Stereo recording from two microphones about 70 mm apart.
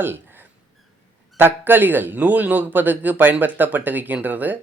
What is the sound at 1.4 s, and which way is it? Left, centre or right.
Speech, right.